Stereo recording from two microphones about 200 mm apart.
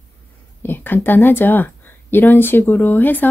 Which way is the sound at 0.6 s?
10° left (ahead or behind).